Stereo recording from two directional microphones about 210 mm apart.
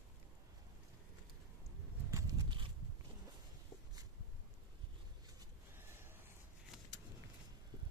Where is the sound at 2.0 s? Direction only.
15° right (ahead or behind).